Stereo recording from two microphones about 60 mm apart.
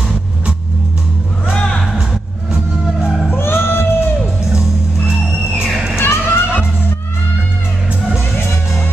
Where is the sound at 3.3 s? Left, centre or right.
Left.